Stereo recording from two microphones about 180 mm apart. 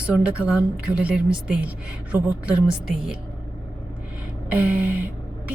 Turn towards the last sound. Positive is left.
turn(degrees=-10)  # may be behind; listen again after turning